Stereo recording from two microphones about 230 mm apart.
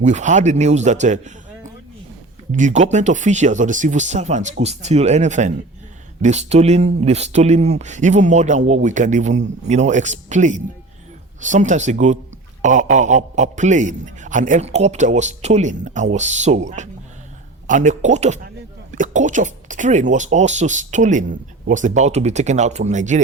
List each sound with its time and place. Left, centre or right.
0.0 s speech: right
2.5 s a man's voice: right